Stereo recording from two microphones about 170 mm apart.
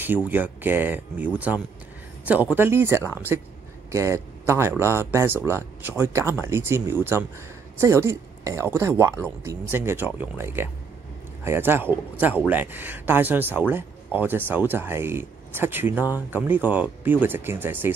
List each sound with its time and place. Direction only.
0.0 s a man's voice: 10° right (ahead or behind)